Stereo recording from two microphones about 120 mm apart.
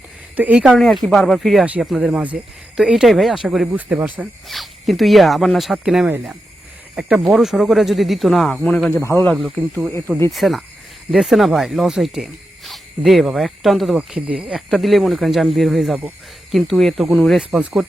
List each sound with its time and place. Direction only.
0.3 s speech: 10° right (ahead or behind)
0.8 s speech: centre (ahead or behind)
4.4 s speech: centre (ahead or behind)
6.1 s speech: 15° right (ahead or behind); by 8.9 s 5° left (ahead or behind)
8.9 s a man's voice: 20° left (ahead or behind)
9.2 s speech: centre (ahead or behind)